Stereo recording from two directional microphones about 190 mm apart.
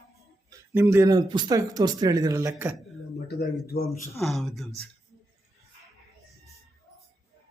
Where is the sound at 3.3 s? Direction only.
60° left (ahead or behind).